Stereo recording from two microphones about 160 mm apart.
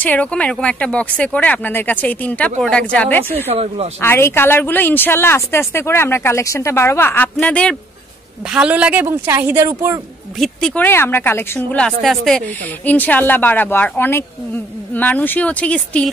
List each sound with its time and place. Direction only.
0.0 s speech: 10° left (ahead or behind)
3.4 s speech: 40° right (ahead or behind)
4.0 s speech: 15° left (ahead or behind)
8.5 s a woman's voice: 5° right (ahead or behind)
10.4 s speech: 5° left (ahead or behind)